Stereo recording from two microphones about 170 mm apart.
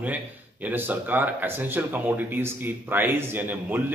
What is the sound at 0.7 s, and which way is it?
Speech, 10° right (ahead or behind).